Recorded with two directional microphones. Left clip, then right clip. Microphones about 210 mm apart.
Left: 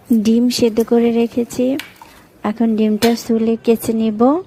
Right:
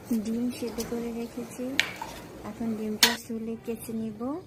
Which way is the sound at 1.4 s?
40° left (ahead or behind).